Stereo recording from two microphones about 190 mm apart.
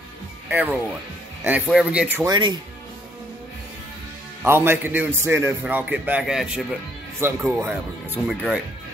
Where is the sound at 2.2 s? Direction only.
25° right (ahead or behind).